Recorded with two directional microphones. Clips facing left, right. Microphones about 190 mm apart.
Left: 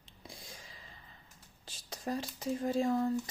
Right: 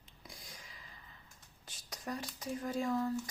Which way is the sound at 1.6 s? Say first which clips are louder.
Left 4 dB; 30° left (ahead or behind).